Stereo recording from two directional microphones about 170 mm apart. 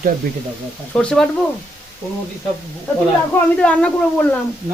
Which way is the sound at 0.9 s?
5° left (ahead or behind).